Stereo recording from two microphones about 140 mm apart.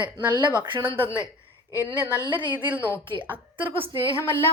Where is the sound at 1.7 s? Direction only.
20° left (ahead or behind).